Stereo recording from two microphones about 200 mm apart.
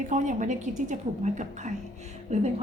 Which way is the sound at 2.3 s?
35° right (ahead or behind).